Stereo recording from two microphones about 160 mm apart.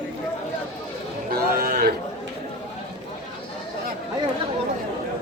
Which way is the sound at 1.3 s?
65° right (ahead or behind).